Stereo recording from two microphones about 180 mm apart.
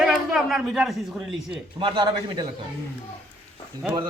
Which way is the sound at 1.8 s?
25° right (ahead or behind).